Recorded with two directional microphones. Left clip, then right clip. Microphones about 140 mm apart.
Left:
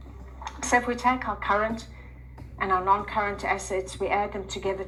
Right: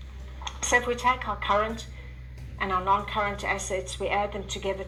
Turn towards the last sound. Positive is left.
turn(degrees=-40)  # may be behind; listen again after turning